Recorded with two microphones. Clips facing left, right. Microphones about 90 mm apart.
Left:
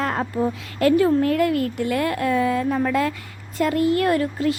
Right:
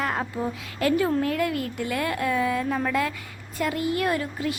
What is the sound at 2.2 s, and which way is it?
Speech, 30° left (ahead or behind).